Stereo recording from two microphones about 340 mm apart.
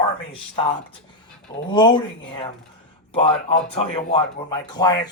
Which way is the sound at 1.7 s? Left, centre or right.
Centre.